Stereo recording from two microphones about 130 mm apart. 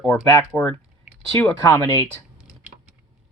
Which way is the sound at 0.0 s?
20° left (ahead or behind).